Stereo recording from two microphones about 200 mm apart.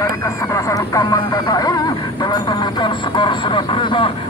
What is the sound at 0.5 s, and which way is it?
Speech, 15° left (ahead or behind).